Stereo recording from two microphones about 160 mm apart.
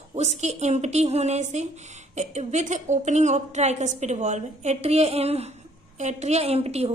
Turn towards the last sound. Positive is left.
turn(degrees=-40)  # may be behind; listen again after turning